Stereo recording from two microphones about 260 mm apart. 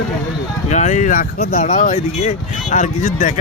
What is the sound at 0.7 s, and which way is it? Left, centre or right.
Speech, left.